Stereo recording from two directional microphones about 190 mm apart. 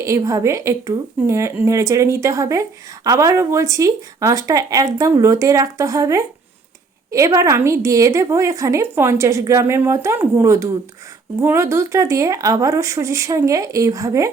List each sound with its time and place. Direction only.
0.0 s a woman's voice: 15° right (ahead or behind)